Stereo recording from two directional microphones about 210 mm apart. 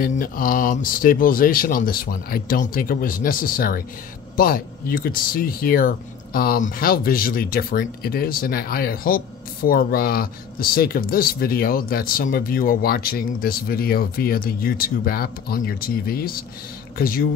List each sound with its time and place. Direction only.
0.0 s speech: 40° left (ahead or behind)